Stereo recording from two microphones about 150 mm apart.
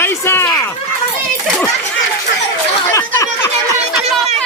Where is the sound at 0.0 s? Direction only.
15° left (ahead or behind).